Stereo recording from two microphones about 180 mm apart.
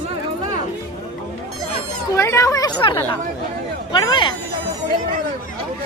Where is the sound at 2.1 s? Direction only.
15° left (ahead or behind).